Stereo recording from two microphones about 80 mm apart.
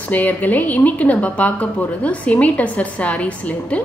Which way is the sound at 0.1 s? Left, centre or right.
Centre.